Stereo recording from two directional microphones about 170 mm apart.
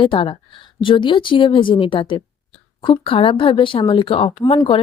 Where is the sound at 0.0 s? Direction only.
30° left (ahead or behind).